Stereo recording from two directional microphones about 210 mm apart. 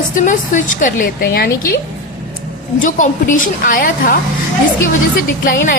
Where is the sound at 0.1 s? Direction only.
35° left (ahead or behind).